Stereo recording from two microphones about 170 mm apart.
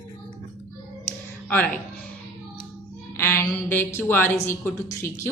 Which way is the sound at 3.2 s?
15° left (ahead or behind).